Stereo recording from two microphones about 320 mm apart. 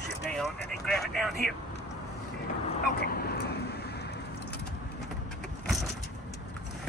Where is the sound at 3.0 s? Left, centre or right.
Left.